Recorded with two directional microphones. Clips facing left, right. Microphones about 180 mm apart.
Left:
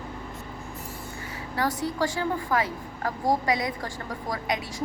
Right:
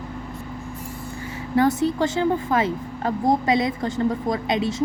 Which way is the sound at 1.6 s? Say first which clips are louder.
Right 8 dB; 25° right (ahead or behind).